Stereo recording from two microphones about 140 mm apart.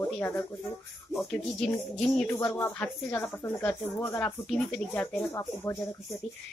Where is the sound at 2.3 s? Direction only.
15° left (ahead or behind).